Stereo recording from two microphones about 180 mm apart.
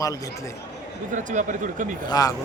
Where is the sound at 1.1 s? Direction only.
45° right (ahead or behind).